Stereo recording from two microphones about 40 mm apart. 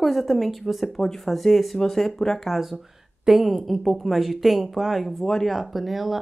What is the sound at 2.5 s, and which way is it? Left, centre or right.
Speech, centre.